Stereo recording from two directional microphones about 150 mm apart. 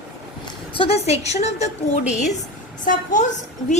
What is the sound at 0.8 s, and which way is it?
A woman's voice, 45° left (ahead or behind).